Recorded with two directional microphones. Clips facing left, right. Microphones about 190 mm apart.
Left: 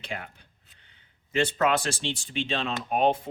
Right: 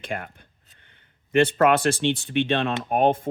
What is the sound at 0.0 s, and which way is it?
Speech, 50° right (ahead or behind).